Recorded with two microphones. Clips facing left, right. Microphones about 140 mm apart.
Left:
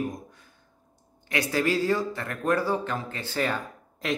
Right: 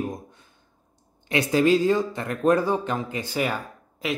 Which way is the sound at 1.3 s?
20° right (ahead or behind).